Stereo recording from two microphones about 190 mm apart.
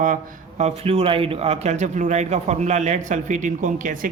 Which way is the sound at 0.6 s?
30° right (ahead or behind).